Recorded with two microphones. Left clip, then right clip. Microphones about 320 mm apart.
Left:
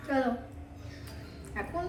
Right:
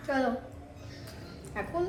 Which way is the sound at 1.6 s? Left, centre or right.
Centre.